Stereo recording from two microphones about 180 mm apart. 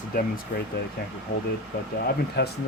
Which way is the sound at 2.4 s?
65° left (ahead or behind).